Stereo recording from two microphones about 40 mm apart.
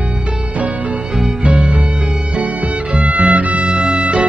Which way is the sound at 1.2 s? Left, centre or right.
Right.